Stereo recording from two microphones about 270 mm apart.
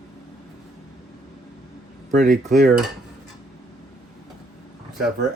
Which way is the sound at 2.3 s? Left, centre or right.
Right.